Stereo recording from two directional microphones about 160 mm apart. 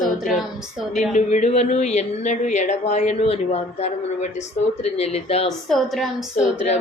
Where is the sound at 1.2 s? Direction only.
45° left (ahead or behind).